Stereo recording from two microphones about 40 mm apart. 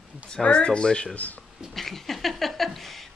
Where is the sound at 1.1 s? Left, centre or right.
Left.